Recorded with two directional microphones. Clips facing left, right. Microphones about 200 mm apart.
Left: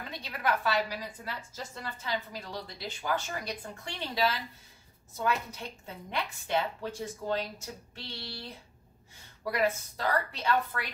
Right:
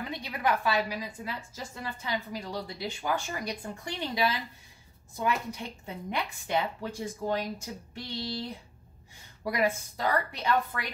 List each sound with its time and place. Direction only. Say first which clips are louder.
0.1 s a woman's voice: right 1 dB; 15° right (ahead or behind)